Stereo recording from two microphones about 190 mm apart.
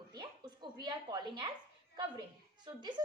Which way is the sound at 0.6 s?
25° right (ahead or behind).